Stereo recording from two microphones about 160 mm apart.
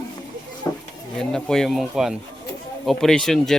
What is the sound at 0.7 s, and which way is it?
Speech, 20° left (ahead or behind).